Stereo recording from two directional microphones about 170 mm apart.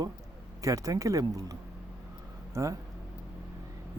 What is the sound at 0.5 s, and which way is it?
A man's voice, 20° right (ahead or behind).